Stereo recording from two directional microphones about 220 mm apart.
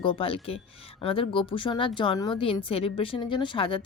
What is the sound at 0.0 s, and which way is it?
Speech, 25° left (ahead or behind).